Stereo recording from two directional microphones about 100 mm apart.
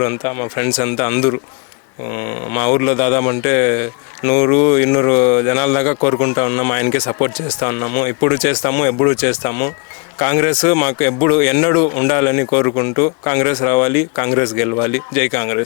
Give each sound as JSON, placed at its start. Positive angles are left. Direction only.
{"t": 0.0, "sound": "a man's voice", "side_deg": 25}